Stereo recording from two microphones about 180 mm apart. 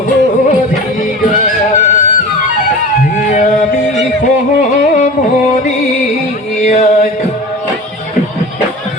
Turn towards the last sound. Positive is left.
turn(degrees=40)  # may be behind; listen again after turning